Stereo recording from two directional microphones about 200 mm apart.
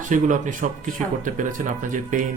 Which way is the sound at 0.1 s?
40° right (ahead or behind).